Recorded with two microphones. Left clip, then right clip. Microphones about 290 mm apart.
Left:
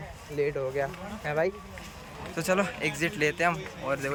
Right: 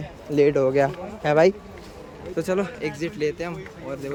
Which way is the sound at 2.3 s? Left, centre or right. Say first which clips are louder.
Right 2 dB; centre.